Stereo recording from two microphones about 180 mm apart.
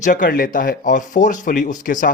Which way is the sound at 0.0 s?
50° left (ahead or behind).